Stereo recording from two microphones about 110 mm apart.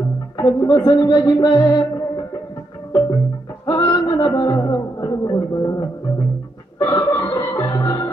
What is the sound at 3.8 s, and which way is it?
Music, 50° left (ahead or behind).